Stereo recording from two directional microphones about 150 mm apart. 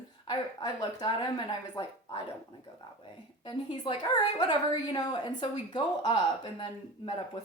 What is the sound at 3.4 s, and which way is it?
Speech, 30° left (ahead or behind).